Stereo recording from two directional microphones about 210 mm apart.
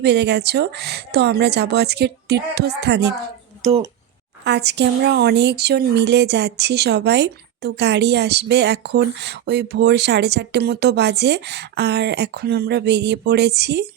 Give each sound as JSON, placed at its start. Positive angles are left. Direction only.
{"t": 0.0, "sound": "speech", "side_deg": -55}
{"t": 3.6, "sound": "speech", "side_deg": -30}
{"t": 4.4, "sound": "speech", "side_deg": -55}